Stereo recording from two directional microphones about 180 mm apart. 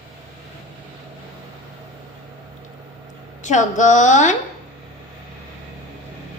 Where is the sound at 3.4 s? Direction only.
45° left (ahead or behind).